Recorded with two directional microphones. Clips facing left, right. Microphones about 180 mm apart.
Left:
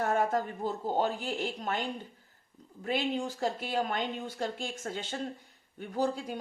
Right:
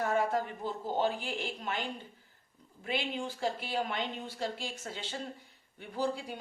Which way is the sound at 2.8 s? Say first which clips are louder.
Left 4 dB; 40° left (ahead or behind).